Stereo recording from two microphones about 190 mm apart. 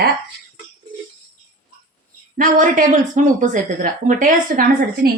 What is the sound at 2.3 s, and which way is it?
Speech, 45° right (ahead or behind).